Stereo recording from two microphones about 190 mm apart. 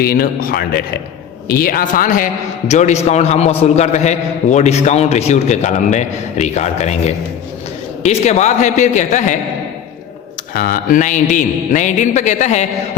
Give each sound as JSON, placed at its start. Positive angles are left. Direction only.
{"t": 0.0, "sound": "a man's voice", "side_deg": 55}
{"t": 10.5, "sound": "a man's voice", "side_deg": 50}